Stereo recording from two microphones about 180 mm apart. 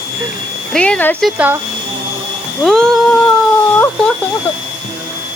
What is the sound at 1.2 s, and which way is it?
Speech, 10° right (ahead or behind).